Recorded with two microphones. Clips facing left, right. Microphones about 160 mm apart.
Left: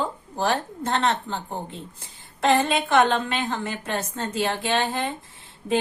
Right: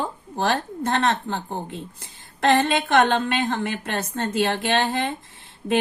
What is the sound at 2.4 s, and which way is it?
A woman's voice, 65° right (ahead or behind).